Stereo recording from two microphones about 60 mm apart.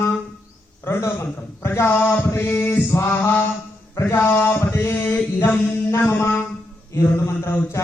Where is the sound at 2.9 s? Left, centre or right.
Left.